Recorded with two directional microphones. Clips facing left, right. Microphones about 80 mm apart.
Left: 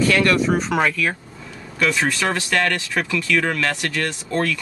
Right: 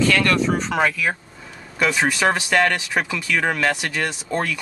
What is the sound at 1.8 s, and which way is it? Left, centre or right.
Speech, centre.